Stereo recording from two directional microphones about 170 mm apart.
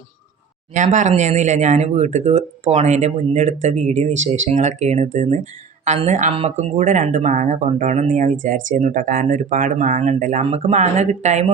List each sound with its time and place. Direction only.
0.7 s speech: 45° right (ahead or behind)